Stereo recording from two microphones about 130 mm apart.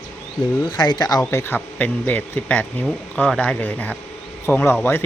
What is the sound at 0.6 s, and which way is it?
Speech, 35° left (ahead or behind).